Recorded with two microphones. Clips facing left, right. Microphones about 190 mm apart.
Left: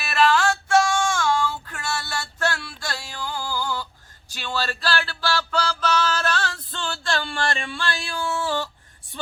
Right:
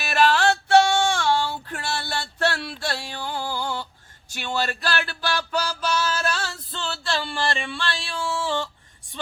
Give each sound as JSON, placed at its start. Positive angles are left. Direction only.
{"t": 0.0, "sound": "female singing", "side_deg": -40}
{"t": 2.8, "sound": "music", "side_deg": -30}